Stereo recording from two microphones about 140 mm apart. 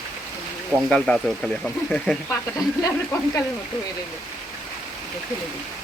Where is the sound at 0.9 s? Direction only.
5° left (ahead or behind).